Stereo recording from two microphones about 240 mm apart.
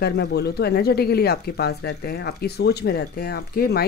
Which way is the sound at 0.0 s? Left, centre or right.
Left.